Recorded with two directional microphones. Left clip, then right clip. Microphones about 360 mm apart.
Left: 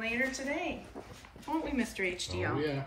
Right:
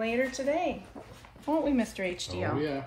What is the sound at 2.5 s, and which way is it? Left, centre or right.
Speech, right.